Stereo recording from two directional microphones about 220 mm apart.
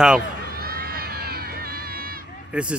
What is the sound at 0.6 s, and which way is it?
Run, 45° right (ahead or behind).